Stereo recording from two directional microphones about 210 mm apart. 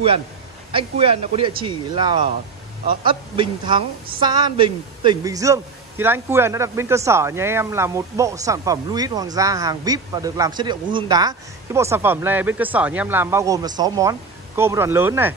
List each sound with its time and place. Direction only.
0.7 s speech: 25° right (ahead or behind); by 15.3 s 10° right (ahead or behind)